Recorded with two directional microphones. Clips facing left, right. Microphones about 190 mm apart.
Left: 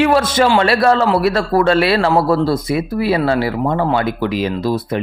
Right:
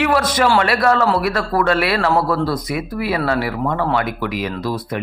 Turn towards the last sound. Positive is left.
turn(degrees=25)  # may be behind; listen again after turning